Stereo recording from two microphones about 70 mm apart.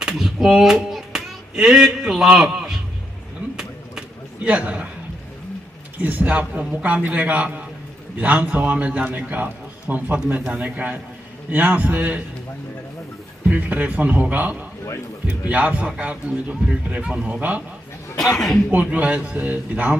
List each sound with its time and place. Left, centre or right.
0.0 s speech: centre
4.4 s a man's voice: centre
6.0 s a man's voice: right
13.5 s a man's voice: right
18.2 s speech: centre
18.7 s a man's voice: right